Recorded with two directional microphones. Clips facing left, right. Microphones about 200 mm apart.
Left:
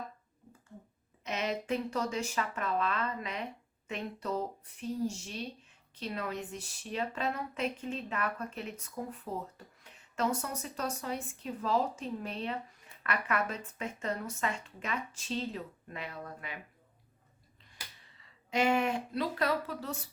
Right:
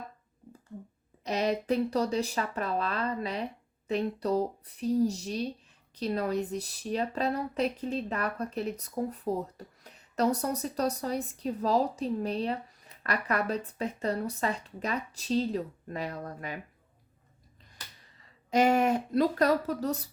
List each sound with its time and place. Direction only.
1.2 s speech: 35° right (ahead or behind)
18.0 s speech: 40° right (ahead or behind)